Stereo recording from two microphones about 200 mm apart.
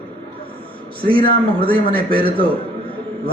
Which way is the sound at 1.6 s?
25° right (ahead or behind).